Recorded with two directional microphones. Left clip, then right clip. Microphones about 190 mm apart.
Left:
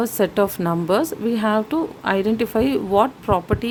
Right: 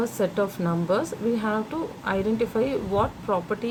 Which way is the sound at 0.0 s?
55° left (ahead or behind).